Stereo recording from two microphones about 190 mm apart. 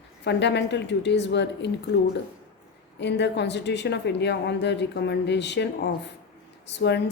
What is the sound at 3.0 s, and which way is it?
A woman's voice, 65° left (ahead or behind).